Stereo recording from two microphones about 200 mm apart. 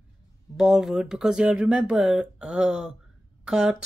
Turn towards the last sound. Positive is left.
turn(degrees=-5)  # may be behind; listen again after turning